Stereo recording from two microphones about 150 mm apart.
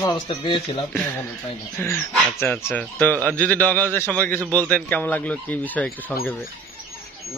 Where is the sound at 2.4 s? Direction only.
15° left (ahead or behind).